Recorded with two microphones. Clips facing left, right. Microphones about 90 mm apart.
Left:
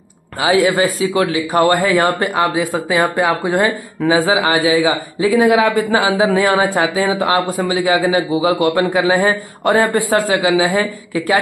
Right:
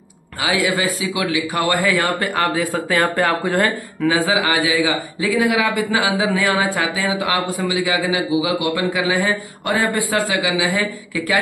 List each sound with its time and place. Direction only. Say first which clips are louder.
0.4 s a man's voice: left 6 dB; 35° left (ahead or behind)
2.3 s speech: left 3 dB; 20° left (ahead or behind)
4.0 s a man's voice: left 4 dB; 35° left (ahead or behind)